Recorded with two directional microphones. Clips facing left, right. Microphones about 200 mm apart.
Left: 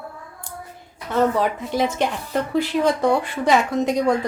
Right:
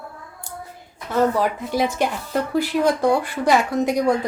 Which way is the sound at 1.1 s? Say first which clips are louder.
Even; 5° right (ahead or behind).